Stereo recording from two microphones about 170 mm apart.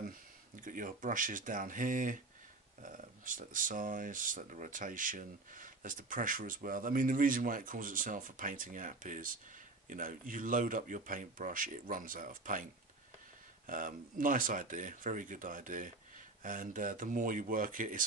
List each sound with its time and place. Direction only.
0.6 s speech: 50° right (ahead or behind)
13.7 s speech: 50° right (ahead or behind)